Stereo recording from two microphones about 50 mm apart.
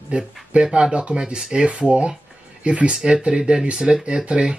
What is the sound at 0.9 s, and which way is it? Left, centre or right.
Speech, right.